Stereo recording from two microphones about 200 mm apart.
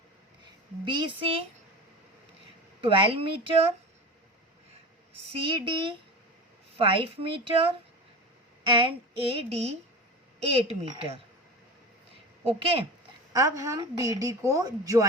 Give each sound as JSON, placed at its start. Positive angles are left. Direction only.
{"t": 0.9, "sound": "a woman's voice", "side_deg": -25}
{"t": 2.8, "sound": "a woman's voice", "side_deg": -25}
{"t": 5.3, "sound": "a woman's voice", "side_deg": -25}
{"t": 8.8, "sound": "a woman's voice", "side_deg": -25}
{"t": 12.5, "sound": "a woman's voice", "side_deg": -25}
{"t": 13.3, "sound": "a woman's voice", "side_deg": -15}